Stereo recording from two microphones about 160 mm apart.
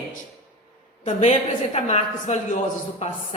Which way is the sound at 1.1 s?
45° left (ahead or behind).